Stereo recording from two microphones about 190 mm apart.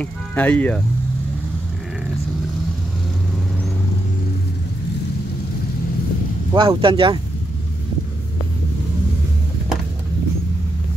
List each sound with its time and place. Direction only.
0.0 s speech: 10° left (ahead or behind)
6.5 s speech: 25° right (ahead or behind)